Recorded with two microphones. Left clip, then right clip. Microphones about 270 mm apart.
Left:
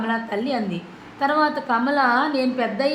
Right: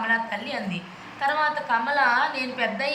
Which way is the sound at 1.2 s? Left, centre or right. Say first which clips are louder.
Left 3 dB; left.